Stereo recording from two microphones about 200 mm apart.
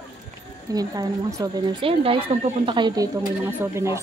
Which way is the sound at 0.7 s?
20° right (ahead or behind).